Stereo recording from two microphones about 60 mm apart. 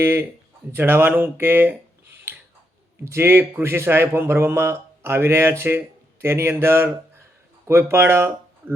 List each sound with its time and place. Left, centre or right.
0.0 s speech: right
3.0 s speech: right